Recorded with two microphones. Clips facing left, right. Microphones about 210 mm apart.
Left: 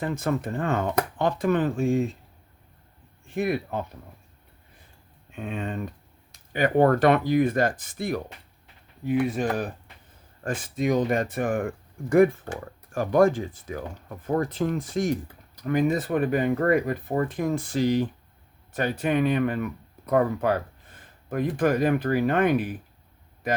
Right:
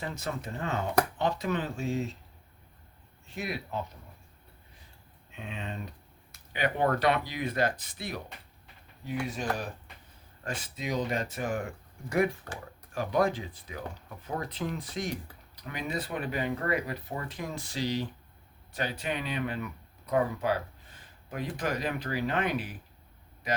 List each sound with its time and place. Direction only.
0.0 s speech: 50° left (ahead or behind)
3.3 s speech: 55° left (ahead or behind)
5.3 s speech: 50° left (ahead or behind)